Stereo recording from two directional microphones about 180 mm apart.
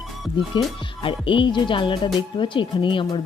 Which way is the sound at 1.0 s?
30° left (ahead or behind).